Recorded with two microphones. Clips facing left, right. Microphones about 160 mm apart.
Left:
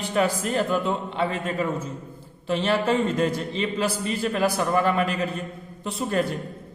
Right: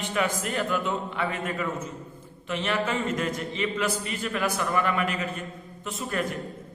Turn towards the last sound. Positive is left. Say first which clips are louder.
# left 5 dB
turn(degrees=30)  # may be behind; listen again after turning